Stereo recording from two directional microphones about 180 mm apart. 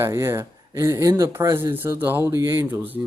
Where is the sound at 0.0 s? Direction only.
15° right (ahead or behind).